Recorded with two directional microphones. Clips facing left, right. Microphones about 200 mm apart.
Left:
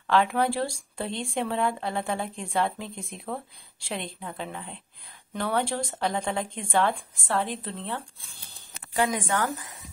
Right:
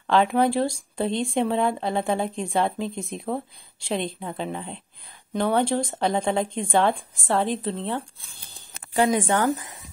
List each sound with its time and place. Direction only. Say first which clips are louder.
0.0 s speech: right 4 dB; 25° right (ahead or behind)